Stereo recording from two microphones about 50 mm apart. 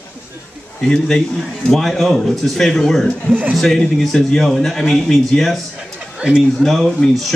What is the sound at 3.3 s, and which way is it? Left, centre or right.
Speech, right.